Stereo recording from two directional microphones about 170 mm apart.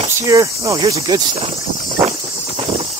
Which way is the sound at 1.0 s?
35° right (ahead or behind).